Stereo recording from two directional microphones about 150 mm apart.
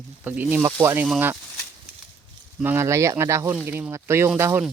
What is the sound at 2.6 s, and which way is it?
Speech, 15° right (ahead or behind).